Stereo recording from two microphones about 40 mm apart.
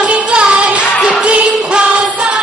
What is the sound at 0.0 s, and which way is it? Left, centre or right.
Music, right.